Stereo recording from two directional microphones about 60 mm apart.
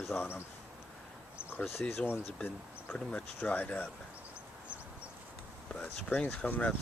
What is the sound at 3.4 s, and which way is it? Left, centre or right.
Speech, left.